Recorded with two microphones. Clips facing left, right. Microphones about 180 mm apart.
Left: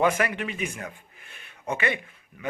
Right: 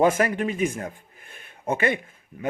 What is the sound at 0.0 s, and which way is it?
A man's voice, 40° right (ahead or behind).